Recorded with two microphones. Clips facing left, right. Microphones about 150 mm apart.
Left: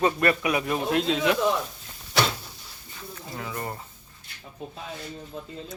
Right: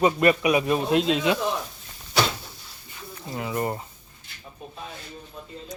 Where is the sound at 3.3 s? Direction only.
20° right (ahead or behind).